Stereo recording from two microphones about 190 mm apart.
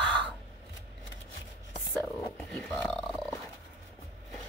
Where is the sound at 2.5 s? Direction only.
5° left (ahead or behind).